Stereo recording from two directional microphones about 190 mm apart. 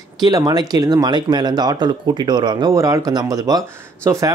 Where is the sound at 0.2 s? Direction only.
20° right (ahead or behind).